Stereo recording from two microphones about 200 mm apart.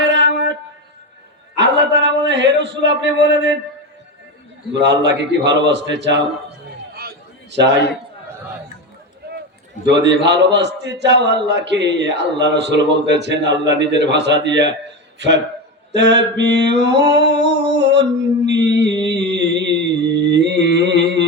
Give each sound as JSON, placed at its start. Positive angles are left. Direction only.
{"t": 0.0, "sound": "a sound", "side_deg": -60}
{"t": 1.5, "sound": "dog", "side_deg": -60}
{"t": 4.7, "sound": "a man's voice", "side_deg": -60}
{"t": 7.5, "sound": "a man's voice", "side_deg": -60}
{"t": 9.8, "sound": "a man's voice", "side_deg": -60}
{"t": 16.0, "sound": "a sound", "side_deg": -60}